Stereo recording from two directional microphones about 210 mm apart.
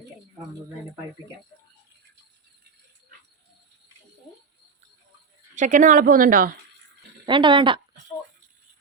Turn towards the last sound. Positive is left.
turn(degrees=-25)  # may be behind; listen again after turning